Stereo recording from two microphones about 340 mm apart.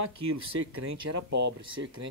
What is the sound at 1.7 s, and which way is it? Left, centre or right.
Speech, right.